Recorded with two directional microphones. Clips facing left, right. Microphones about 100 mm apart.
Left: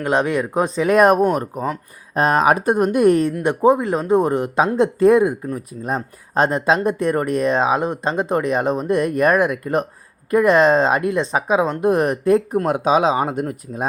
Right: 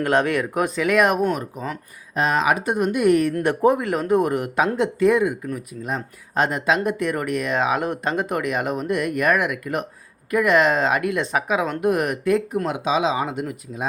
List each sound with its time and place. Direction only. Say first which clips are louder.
0.0 s speech: left 1 dB; 20° left (ahead or behind); by 3.2 s 35° left (ahead or behind)
3.4 s speech: left 3 dB; 20° left (ahead or behind); by 13.8 s 40° left (ahead or behind)